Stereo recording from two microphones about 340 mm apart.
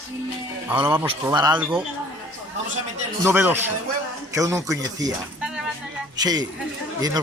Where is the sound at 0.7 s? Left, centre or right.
Centre.